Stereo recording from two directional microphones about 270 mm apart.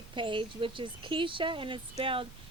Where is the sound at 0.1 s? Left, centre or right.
Centre.